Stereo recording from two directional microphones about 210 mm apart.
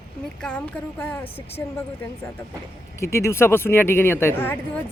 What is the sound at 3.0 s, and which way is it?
Speech, 15° left (ahead or behind).